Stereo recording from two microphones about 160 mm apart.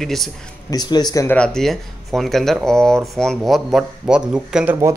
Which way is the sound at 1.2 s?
5° left (ahead or behind).